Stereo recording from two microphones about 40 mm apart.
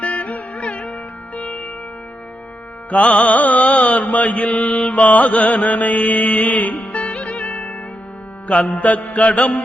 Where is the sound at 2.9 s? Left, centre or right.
Left.